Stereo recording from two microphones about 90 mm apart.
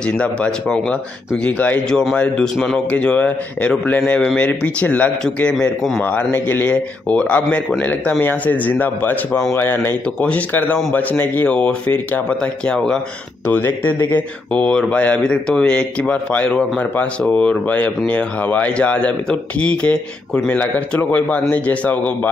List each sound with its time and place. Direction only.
0.0 s speech: 10° left (ahead or behind)
6.0 s speech: 20° left (ahead or behind)
9.3 s speech: 5° left (ahead or behind)
9.6 s speech: 25° left (ahead or behind)
13.5 s speech: 25° left (ahead or behind)
14.5 s speech: 10° left (ahead or behind)